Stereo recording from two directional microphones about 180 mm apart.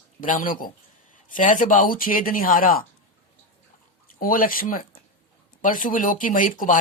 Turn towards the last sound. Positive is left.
turn(degrees=45)  # may be behind; listen again after turning